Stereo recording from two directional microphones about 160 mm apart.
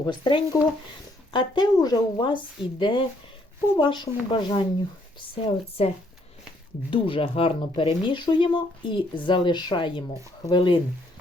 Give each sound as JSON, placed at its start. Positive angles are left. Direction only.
{"t": 0.0, "sound": "a woman's voice", "side_deg": 30}
{"t": 6.9, "sound": "speech", "side_deg": 35}